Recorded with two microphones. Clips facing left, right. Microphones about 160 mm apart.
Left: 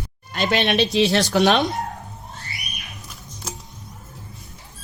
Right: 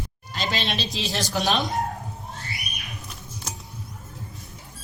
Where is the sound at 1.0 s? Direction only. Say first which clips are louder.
Left 8 dB; 75° left (ahead or behind).